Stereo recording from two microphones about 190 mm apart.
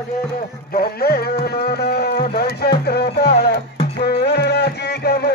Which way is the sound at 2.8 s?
55° left (ahead or behind).